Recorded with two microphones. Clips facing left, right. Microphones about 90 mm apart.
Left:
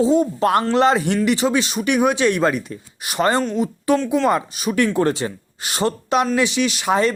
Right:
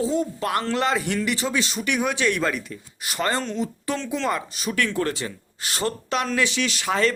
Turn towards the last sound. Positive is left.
turn(degrees=20)  # may be behind; listen again after turning